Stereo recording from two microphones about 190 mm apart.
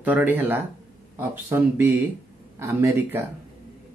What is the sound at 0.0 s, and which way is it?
Speech, 10° right (ahead or behind).